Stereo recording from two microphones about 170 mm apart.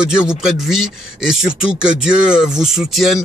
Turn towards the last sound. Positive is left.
turn(degrees=0)  # may be behind; listen again after turning